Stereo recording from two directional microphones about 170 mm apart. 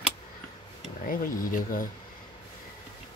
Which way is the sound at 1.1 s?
55° left (ahead or behind).